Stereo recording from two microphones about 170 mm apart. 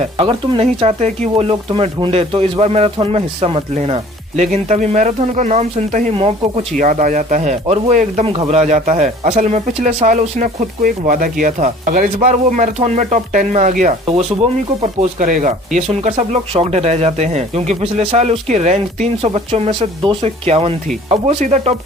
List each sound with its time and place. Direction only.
0.2 s speech: 30° right (ahead or behind)
1.5 s speech: 30° right (ahead or behind)
6.1 s speech: 35° right (ahead or behind)